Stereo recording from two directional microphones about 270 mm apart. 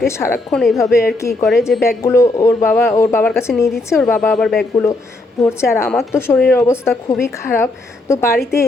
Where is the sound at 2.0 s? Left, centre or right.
Centre.